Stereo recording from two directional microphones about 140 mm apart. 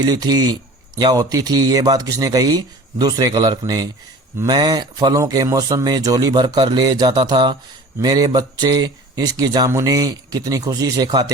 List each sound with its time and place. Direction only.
0.0 s speech: 25° right (ahead or behind)